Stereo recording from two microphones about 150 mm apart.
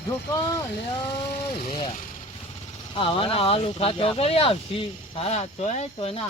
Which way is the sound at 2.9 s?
35° left (ahead or behind).